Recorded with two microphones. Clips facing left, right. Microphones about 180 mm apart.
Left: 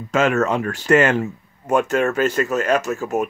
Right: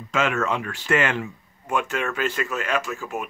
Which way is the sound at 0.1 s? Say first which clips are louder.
Left 6 dB; 40° left (ahead or behind).